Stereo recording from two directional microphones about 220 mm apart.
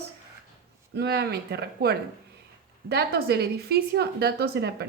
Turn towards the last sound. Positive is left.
turn(degrees=-45)  # may be behind; listen again after turning